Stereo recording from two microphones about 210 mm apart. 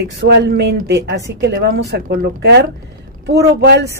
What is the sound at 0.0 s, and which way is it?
A woman's voice, 50° right (ahead or behind).